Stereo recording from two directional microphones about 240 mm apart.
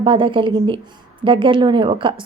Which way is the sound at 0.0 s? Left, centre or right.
Right.